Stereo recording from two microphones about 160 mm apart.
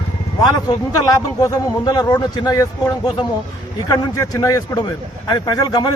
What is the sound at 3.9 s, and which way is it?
Speech, 20° left (ahead or behind).